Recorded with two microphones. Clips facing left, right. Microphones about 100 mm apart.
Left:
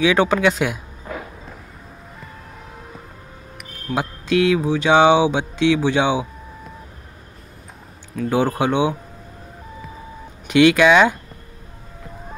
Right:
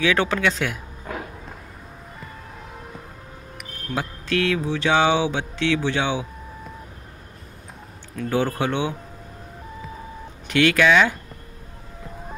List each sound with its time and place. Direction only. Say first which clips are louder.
0.0 s speech: left 5 dB; 15° left (ahead or behind)
3.9 s speech: left 5 dB; 15° left (ahead or behind)
8.3 s speech: left 4 dB; 15° left (ahead or behind)
10.5 s speech: left 5 dB; 20° left (ahead or behind)